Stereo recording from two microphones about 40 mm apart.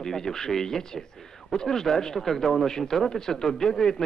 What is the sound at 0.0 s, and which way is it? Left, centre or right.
Speech, centre.